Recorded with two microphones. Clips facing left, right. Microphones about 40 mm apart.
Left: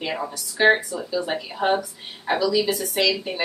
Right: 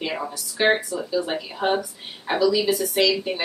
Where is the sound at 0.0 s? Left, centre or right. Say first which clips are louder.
Even; centre.